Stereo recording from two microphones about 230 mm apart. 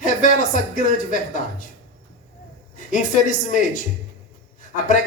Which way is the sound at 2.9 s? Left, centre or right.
Left.